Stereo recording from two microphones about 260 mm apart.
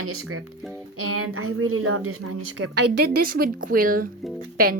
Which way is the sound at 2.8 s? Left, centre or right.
Right.